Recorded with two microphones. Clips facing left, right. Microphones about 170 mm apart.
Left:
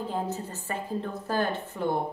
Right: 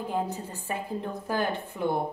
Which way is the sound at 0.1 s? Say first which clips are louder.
Right 1 dB; 15° right (ahead or behind).